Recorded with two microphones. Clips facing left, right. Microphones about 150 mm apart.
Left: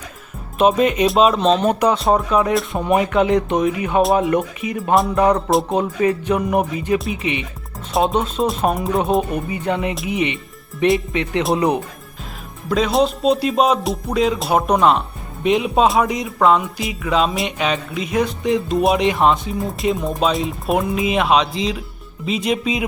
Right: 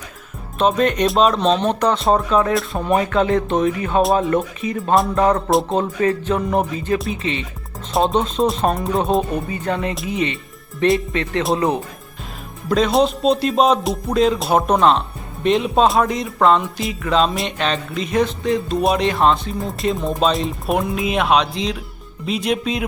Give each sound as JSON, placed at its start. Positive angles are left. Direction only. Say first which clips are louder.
{"t": 0.6, "sound": "speech", "louder": "left 2 dB", "side_deg": 5}
{"t": 2.7, "sound": "speech", "louder": "left 1 dB", "side_deg": 15}
{"t": 7.9, "sound": "speech", "louder": "right 1 dB", "side_deg": 5}
{"t": 10.1, "sound": "music", "louder": "left 1 dB", "side_deg": 15}
{"t": 11.1, "sound": "speech", "louder": "left 1 dB", "side_deg": 15}
{"t": 12.6, "sound": "speech", "louder": "right 1 dB", "side_deg": 5}
{"t": 19.8, "sound": "speech", "louder": "right 1 dB", "side_deg": 0}